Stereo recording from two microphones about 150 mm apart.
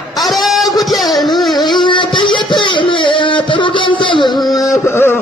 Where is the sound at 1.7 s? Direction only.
30° left (ahead or behind).